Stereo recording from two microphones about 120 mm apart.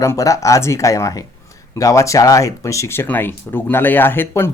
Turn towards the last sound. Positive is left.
turn(degrees=20)  # may be behind; listen again after turning